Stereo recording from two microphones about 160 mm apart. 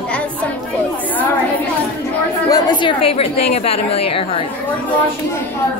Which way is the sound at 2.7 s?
30° left (ahead or behind).